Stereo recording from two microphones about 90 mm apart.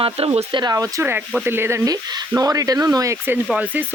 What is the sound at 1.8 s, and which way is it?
Speech, 45° right (ahead or behind).